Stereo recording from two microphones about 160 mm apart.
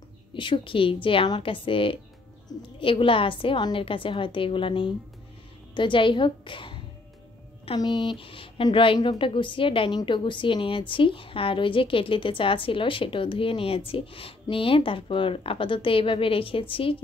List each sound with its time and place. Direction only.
0.3 s a woman's voice: 30° left (ahead or behind)